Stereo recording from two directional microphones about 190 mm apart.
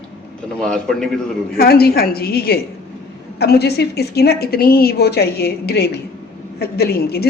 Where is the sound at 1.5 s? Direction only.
55° left (ahead or behind).